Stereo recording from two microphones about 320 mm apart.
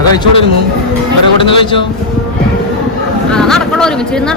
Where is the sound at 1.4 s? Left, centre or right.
Centre.